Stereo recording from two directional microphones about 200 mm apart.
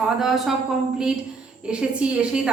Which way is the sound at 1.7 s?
5° right (ahead or behind).